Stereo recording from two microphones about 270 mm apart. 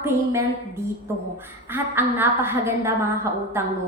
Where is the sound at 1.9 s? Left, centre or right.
Centre.